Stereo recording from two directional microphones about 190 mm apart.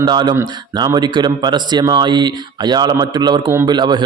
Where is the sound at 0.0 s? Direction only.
20° right (ahead or behind).